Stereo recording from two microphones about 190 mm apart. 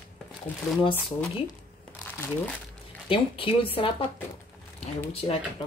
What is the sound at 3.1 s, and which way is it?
Speech, 30° left (ahead or behind).